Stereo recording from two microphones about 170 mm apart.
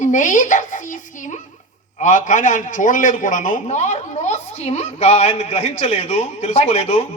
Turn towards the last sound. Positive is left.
turn(degrees=40)  # may be behind; listen again after turning